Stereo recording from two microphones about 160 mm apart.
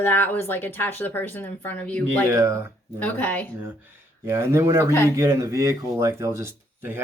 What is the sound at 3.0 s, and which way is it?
Speech, 10° left (ahead or behind).